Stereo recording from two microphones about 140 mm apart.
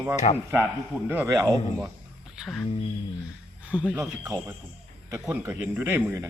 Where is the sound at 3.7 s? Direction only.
10° right (ahead or behind).